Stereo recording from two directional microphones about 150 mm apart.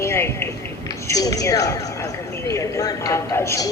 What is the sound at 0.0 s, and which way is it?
Speech, 15° left (ahead or behind).